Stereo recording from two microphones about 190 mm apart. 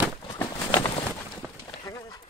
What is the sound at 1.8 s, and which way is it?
Bird, 15° left (ahead or behind).